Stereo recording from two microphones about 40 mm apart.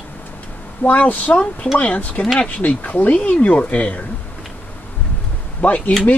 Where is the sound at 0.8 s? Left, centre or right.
Left.